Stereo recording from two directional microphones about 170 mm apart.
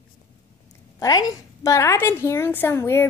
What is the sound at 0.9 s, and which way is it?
A woman's voice, 20° left (ahead or behind).